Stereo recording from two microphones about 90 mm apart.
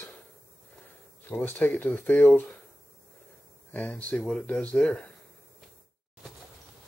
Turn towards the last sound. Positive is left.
turn(degrees=10)  # may be behind; listen again after turning